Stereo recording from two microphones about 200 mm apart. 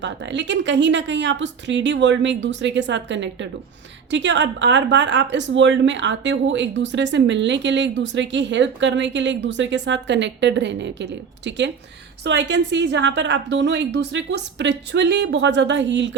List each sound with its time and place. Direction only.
0.0 s a woman's voice: 65° right (ahead or behind)